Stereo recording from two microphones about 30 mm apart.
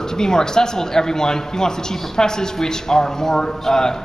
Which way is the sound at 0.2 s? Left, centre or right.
Left.